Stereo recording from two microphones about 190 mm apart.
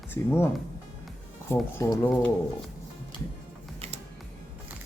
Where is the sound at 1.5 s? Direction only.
15° left (ahead or behind).